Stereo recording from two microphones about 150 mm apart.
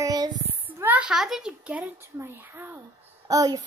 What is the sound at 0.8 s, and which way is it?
A child's voice, 10° right (ahead or behind).